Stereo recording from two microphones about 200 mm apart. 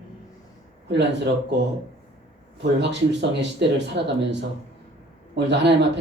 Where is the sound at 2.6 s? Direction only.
60° right (ahead or behind).